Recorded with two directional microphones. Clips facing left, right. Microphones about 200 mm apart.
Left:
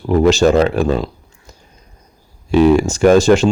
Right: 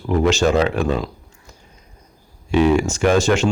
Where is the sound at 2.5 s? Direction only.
35° left (ahead or behind).